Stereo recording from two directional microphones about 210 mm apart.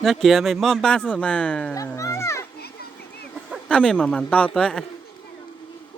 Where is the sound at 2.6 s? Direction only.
50° left (ahead or behind).